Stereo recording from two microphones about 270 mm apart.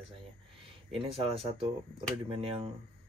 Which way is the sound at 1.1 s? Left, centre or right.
Right.